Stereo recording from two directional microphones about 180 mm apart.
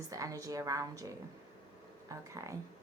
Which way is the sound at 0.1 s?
20° right (ahead or behind).